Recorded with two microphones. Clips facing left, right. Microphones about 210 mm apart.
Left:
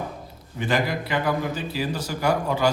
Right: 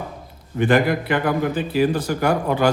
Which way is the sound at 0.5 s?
55° right (ahead or behind).